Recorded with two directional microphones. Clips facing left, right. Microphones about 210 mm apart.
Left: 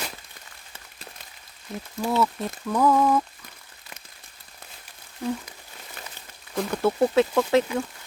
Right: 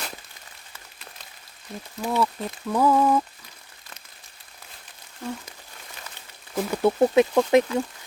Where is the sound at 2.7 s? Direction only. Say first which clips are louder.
Even; 10° right (ahead or behind).